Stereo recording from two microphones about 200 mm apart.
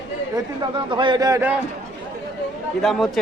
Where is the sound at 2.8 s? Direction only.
Centre (ahead or behind).